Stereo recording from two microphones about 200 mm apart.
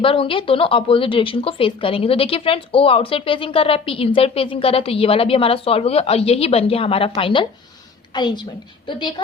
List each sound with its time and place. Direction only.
0.0 s speech: 25° left (ahead or behind)